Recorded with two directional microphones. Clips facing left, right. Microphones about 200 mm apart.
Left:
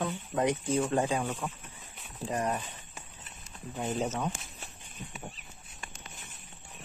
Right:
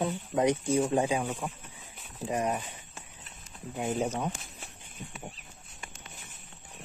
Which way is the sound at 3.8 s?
15° right (ahead or behind).